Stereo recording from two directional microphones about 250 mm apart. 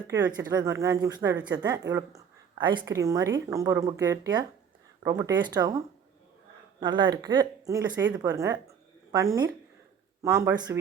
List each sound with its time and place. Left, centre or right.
0.1 s speech: centre